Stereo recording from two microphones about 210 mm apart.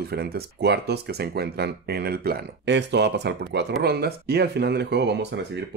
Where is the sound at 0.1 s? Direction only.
50° right (ahead or behind).